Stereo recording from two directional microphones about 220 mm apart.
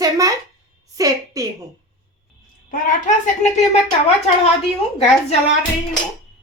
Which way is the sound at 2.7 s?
35° left (ahead or behind).